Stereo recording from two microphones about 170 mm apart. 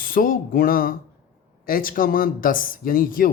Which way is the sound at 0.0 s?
55° left (ahead or behind).